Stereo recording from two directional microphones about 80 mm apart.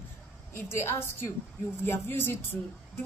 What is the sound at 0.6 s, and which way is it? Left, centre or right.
A woman's voice, left.